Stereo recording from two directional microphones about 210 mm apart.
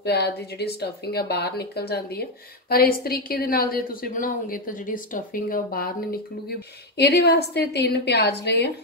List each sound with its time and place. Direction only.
0.0 s a woman's voice: 50° left (ahead or behind)
7.0 s a woman's voice: 50° left (ahead or behind)